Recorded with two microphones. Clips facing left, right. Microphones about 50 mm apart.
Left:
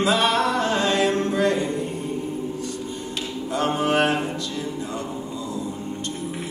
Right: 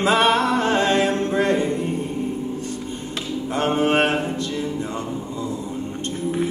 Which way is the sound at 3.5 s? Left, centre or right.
Right.